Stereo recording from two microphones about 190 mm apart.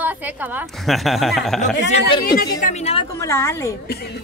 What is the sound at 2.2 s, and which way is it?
Speech, 50° left (ahead or behind).